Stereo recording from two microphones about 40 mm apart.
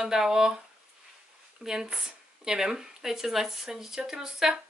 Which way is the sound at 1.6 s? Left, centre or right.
Centre.